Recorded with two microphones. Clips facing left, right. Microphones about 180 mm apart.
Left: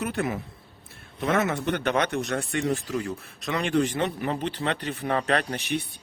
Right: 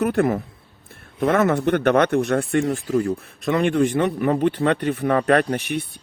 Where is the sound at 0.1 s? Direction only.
55° right (ahead or behind).